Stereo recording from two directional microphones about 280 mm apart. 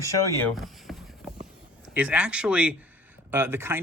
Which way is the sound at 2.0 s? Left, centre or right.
Centre.